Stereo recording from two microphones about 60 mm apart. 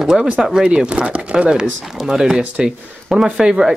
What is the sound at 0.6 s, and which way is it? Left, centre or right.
Speech, centre.